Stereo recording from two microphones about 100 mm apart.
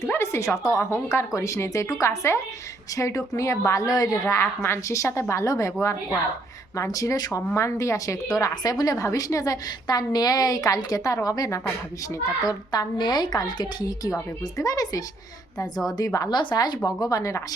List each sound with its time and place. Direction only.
0.0 s a woman's voice: 25° left (ahead or behind)
4.3 s a woman's voice: 25° left (ahead or behind)
6.7 s a woman's voice: 35° left (ahead or behind)
16.3 s speech: 50° left (ahead or behind); by 17.4 s 35° left (ahead or behind)